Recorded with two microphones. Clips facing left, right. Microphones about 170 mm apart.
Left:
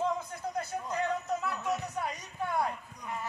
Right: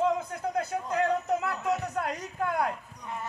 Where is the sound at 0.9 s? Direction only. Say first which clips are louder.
Right 6 dB; 75° right (ahead or behind).